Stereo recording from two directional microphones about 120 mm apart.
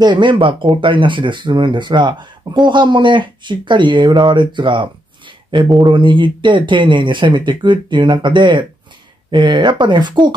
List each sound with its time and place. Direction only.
0.0 s speech: 40° right (ahead or behind)